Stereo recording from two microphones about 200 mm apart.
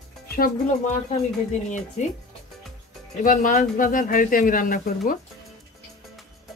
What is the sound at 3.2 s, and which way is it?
Speech, 40° left (ahead or behind).